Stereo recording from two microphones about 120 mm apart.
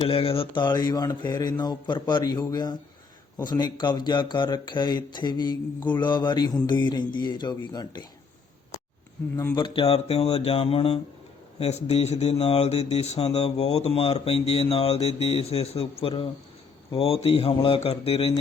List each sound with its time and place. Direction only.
0.0 s speech: 55° left (ahead or behind); by 8.0 s 35° left (ahead or behind)
9.6 s speech: 45° left (ahead or behind)